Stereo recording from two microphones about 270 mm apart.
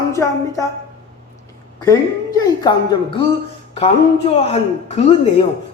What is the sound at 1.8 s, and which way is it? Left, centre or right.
Speech, centre.